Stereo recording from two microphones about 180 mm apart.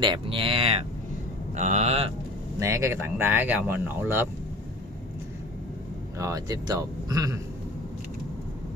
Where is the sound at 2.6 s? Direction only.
15° right (ahead or behind).